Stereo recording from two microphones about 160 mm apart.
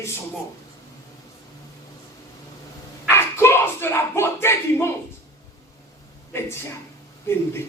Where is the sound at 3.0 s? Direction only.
15° left (ahead or behind).